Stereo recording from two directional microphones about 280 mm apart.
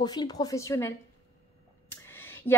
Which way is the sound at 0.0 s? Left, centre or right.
Centre.